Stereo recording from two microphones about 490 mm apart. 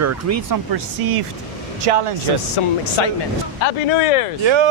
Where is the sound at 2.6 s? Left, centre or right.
Left.